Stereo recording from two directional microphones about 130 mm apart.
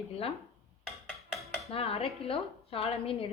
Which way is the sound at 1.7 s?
50° left (ahead or behind).